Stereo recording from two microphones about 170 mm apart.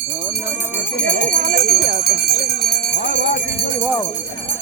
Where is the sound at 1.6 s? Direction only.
65° left (ahead or behind); by 3.4 s 90° left.